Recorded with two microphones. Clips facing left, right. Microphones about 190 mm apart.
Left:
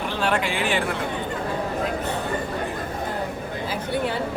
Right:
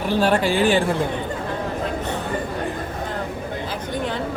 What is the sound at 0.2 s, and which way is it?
Speech, 35° right (ahead or behind).